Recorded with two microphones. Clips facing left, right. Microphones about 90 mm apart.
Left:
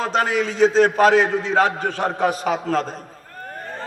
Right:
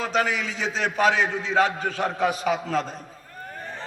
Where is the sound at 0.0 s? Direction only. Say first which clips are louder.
Left 4 dB; 35° left (ahead or behind).